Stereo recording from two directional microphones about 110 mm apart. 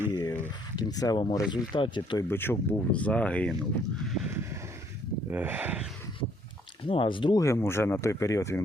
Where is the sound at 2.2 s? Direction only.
20° left (ahead or behind).